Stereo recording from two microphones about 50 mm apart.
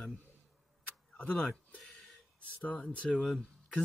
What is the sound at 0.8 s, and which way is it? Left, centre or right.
Tick-tock, left.